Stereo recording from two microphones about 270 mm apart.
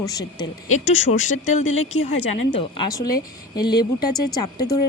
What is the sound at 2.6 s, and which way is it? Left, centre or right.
Speech, centre.